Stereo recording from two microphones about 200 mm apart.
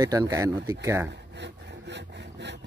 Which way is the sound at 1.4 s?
60° right (ahead or behind).